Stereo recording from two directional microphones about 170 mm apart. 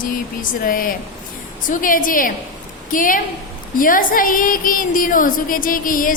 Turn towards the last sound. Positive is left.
turn(degrees=55)  # may be behind; listen again after turning